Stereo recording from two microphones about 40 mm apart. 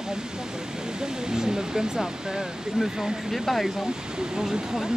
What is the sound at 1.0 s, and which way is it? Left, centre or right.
Speech, centre.